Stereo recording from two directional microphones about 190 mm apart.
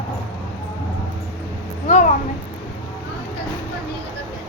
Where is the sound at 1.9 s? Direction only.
40° left (ahead or behind).